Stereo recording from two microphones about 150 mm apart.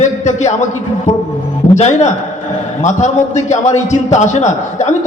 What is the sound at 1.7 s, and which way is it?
A man's voice, 50° left (ahead or behind).